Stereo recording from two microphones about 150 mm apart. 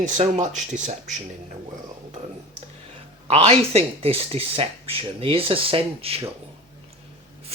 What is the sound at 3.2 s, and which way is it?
Speech, 40° right (ahead or behind).